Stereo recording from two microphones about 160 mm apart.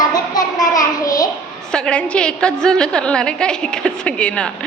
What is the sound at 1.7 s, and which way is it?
A woman's voice, 5° left (ahead or behind).